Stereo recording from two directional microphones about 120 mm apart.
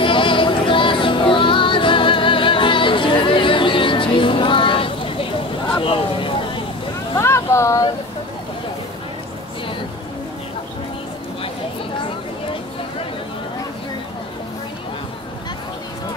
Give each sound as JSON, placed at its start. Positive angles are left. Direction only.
{"t": 0.0, "sound": "music", "side_deg": 45}
{"t": 7.2, "sound": "vehicle", "side_deg": 20}